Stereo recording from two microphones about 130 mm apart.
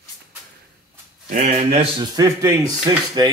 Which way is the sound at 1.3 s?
70° right (ahead or behind).